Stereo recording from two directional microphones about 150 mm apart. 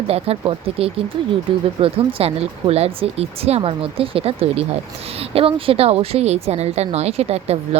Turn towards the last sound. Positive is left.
turn(degrees=-45)  # may be behind; listen again after turning